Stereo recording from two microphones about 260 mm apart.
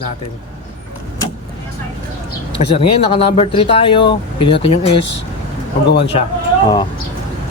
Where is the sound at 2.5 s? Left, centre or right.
Left.